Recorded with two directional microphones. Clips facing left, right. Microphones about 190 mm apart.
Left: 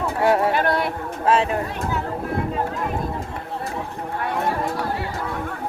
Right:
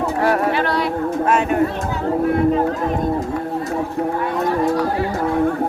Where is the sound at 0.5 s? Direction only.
50° left (ahead or behind).